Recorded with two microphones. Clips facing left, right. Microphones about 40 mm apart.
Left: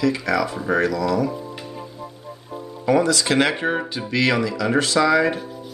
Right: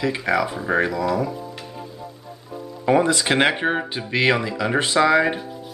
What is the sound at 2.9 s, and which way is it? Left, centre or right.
Speech, right.